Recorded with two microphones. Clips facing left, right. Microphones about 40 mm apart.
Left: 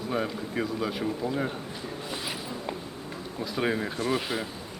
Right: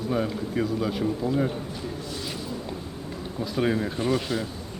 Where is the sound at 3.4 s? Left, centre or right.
Centre.